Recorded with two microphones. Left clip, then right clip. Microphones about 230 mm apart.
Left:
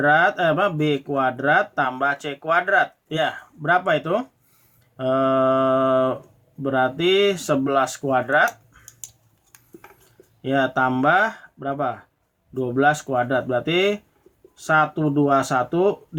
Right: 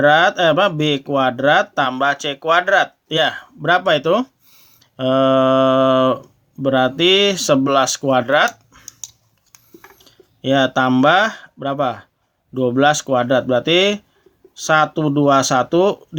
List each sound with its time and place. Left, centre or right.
0.0 s speech: right
10.4 s speech: right